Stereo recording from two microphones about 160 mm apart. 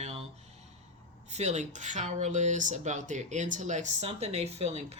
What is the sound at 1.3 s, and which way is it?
Speech, 45° right (ahead or behind).